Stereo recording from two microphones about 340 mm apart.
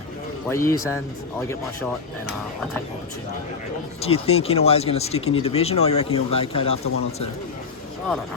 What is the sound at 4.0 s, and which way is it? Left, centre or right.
Speech, centre.